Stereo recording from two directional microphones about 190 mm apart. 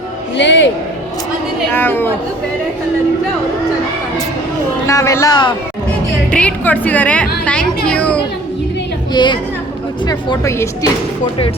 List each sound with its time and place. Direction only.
0.3 s speech: 70° left (ahead or behind)
1.7 s speech: 10° left (ahead or behind)
4.9 s speech: 15° left (ahead or behind)
6.3 s a woman's voice: 10° left (ahead or behind)
9.1 s speech: 25° left (ahead or behind)